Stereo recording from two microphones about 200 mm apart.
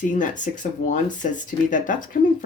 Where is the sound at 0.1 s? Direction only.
40° left (ahead or behind).